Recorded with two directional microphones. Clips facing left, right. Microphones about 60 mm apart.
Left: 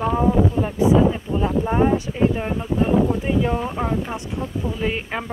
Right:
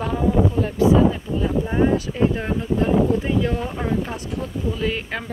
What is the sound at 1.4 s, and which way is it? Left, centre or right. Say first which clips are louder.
Speech: left 1 dB; left.